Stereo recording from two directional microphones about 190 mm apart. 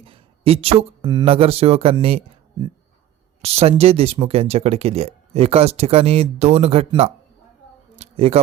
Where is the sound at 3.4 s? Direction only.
30° right (ahead or behind).